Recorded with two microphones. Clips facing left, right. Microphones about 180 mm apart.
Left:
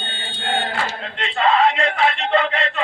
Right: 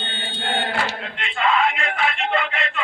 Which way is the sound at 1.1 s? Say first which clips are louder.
Left 4 dB; 35° left (ahead or behind).